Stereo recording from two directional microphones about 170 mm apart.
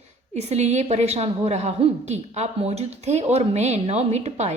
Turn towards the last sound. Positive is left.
turn(degrees=-40)  # may be behind; listen again after turning